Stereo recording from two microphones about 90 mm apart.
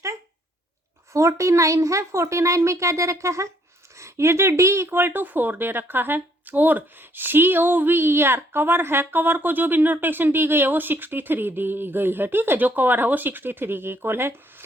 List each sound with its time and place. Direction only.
1.1 s a woman's voice: 35° right (ahead or behind)